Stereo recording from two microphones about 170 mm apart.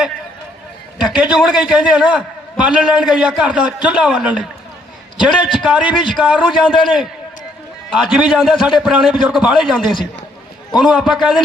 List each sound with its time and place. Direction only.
1.0 s a man's voice: 5° right (ahead or behind)
8.1 s a man's voice: 5° right (ahead or behind)
9.8 s a man's voice: 30° left (ahead or behind)
10.8 s a man's voice: 5° right (ahead or behind)